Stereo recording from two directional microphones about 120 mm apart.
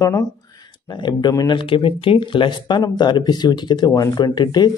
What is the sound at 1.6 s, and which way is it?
Speech, 45° left (ahead or behind).